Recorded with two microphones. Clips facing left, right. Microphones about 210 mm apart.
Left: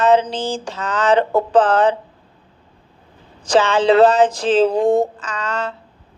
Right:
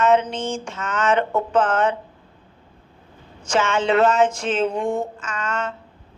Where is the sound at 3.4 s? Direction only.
35° left (ahead or behind).